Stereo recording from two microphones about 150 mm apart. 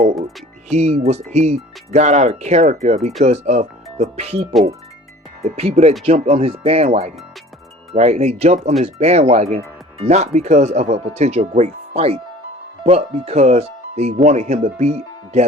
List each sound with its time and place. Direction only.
0.7 s speech: 50° right (ahead or behind)